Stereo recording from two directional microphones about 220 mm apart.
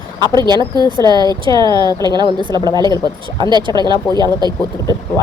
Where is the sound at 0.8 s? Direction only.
20° right (ahead or behind).